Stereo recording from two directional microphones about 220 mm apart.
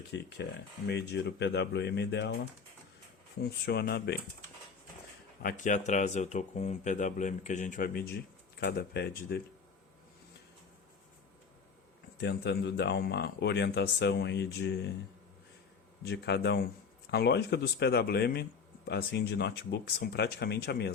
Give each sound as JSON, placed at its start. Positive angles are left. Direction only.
{"t": 0.1, "sound": "speech", "side_deg": 50}
{"t": 3.4, "sound": "speech", "side_deg": 45}
{"t": 5.4, "sound": "speech", "side_deg": 35}
{"t": 12.2, "sound": "speech", "side_deg": 50}
{"t": 16.0, "sound": "speech", "side_deg": 50}